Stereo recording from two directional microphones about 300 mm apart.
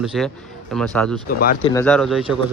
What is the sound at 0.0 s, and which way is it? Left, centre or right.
Speech, centre.